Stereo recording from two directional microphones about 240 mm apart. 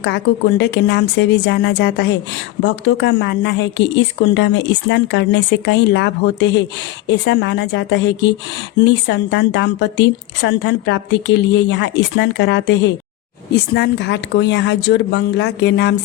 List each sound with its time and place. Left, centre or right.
0.0 s a woman's voice: left